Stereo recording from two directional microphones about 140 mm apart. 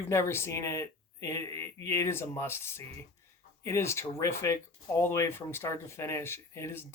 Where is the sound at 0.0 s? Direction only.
20° left (ahead or behind).